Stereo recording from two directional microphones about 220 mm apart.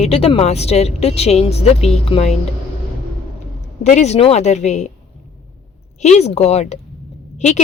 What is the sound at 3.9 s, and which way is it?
A woman's voice, 30° left (ahead or behind).